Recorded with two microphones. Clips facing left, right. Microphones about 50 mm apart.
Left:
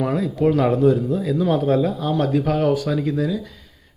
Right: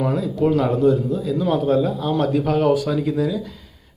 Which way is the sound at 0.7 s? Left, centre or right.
Centre.